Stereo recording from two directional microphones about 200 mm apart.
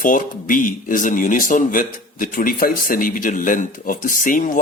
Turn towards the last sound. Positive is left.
turn(degrees=40)  # may be behind; listen again after turning